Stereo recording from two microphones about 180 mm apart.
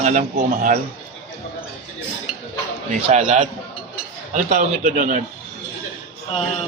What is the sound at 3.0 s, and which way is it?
A man's voice, 40° right (ahead or behind).